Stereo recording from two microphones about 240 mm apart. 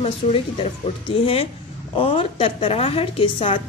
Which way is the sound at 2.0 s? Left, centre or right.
Left.